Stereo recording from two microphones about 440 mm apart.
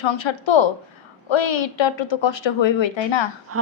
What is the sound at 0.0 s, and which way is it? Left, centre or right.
A woman's voice, left.